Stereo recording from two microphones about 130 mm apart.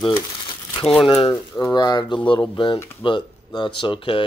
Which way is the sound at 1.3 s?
30° left (ahead or behind).